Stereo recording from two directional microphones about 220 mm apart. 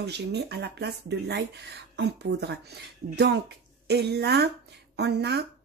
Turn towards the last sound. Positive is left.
turn(degrees=-50)  # may be behind; listen again after turning